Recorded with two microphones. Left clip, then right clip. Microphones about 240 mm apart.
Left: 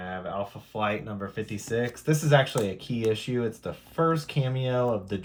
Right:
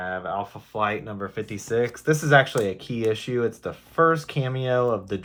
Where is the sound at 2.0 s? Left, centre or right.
Right.